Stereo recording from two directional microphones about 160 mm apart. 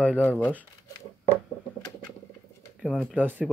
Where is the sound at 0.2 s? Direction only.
10° left (ahead or behind).